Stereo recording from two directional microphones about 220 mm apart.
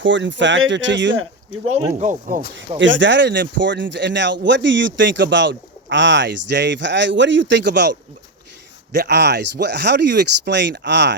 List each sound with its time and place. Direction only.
0.0 s speech: 55° right (ahead or behind)
2.0 s speech: 35° right (ahead or behind)
2.7 s speech: 55° right (ahead or behind)